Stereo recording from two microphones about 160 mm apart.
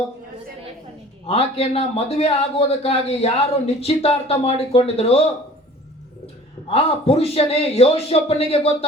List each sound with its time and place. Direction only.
1.3 s a man's voice: 40° left (ahead or behind)
6.7 s a man's voice: 40° left (ahead or behind)